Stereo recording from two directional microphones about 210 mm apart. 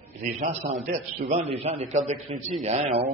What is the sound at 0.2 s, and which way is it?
A man's voice, 35° right (ahead or behind).